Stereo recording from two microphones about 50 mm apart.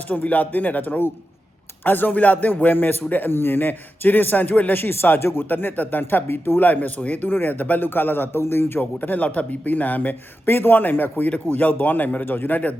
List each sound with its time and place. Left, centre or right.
0.1 s a man's voice: left
8.8 s a man's voice: left